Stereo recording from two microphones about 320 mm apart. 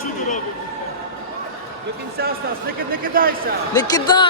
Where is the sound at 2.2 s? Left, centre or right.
Right.